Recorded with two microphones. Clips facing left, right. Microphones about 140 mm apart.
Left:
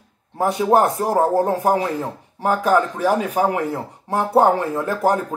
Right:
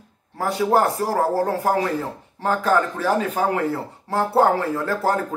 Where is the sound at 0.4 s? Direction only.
20° left (ahead or behind).